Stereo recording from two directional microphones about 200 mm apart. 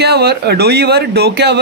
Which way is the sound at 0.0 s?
55° right (ahead or behind).